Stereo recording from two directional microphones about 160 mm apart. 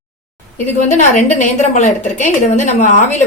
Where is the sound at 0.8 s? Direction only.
50° left (ahead or behind).